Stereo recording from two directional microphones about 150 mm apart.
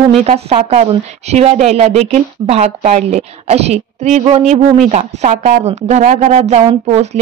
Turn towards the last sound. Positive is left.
turn(degrees=-45)  # may be behind; listen again after turning